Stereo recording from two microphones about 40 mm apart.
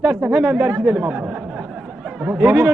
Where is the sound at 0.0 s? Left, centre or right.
Right.